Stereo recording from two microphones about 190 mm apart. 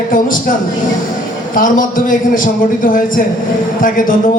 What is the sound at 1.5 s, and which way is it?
A man's voice, 45° left (ahead or behind).